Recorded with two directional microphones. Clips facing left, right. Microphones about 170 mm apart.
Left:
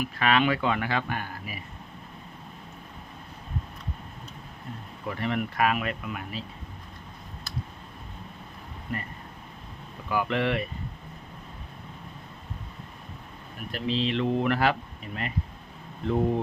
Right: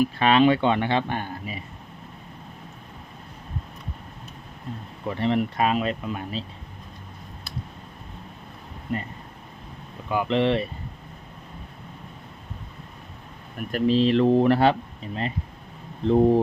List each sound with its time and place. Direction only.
0.0 s speech: 30° right (ahead or behind)
5.0 s speech: 25° right (ahead or behind)
8.9 s speech: 25° right (ahead or behind)
10.1 s speech: 25° right (ahead or behind)
13.7 s speech: 45° right (ahead or behind); by 16.4 s 30° right (ahead or behind)